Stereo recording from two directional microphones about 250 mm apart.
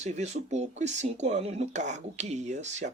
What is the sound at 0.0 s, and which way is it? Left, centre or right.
Speech, right.